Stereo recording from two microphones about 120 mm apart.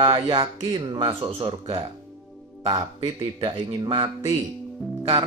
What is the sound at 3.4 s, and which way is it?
Speech, 45° right (ahead or behind).